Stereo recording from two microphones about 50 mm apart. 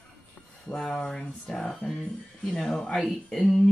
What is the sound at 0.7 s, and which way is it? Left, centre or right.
Speech, centre.